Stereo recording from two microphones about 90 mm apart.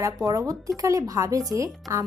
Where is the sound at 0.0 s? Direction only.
35° right (ahead or behind).